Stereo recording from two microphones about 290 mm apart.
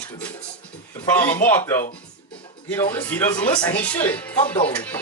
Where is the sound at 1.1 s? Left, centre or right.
Centre.